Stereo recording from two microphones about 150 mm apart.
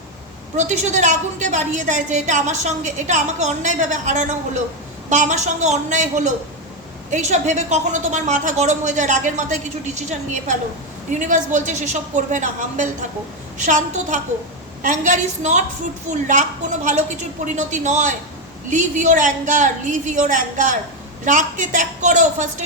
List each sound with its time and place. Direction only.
0.5 s a woman's voice: 50° right (ahead or behind)